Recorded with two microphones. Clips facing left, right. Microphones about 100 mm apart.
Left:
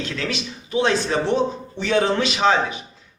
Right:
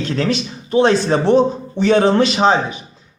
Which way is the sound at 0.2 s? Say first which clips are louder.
Right 8 dB; 40° right (ahead or behind).